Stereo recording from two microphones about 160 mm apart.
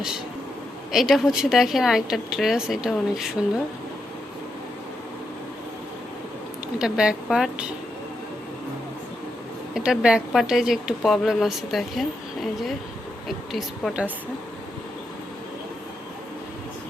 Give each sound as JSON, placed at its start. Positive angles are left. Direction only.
{"t": 0.9, "sound": "speech", "side_deg": 0}
{"t": 6.7, "sound": "speech", "side_deg": -5}
{"t": 9.7, "sound": "speech", "side_deg": -5}